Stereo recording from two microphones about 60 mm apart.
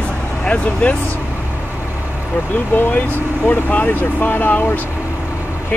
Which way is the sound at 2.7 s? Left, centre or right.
Left.